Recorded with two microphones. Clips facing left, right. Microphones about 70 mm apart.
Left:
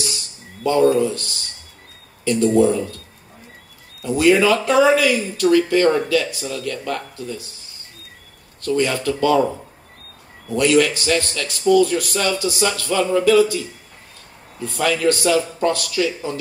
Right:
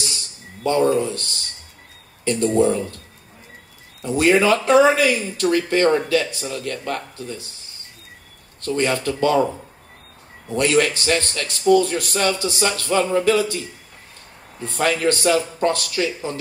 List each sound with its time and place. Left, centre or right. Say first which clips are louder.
0.7 s speech: left 3 dB; right
2.2 s speech: left 2 dB; right
4.2 s speech: left 1 dB; right
8.6 s speech: left 1 dB; right
10.5 s speech: left 2 dB; right